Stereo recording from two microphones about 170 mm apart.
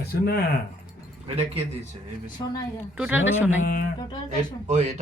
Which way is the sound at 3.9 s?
25° left (ahead or behind).